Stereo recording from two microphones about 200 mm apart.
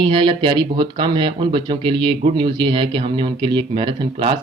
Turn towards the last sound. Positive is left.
turn(degrees=-25)  # may be behind; listen again after turning